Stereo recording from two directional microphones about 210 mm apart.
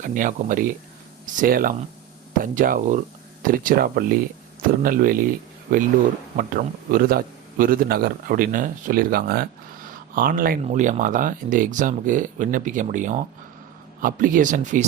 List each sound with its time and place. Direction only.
0.0 s a man's voice: 40° right (ahead or behind)